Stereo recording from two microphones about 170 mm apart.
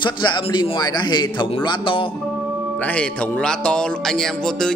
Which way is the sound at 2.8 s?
10° left (ahead or behind).